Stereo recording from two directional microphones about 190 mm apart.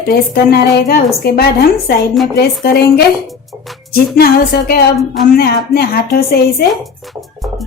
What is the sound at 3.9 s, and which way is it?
Speech, 55° left (ahead or behind).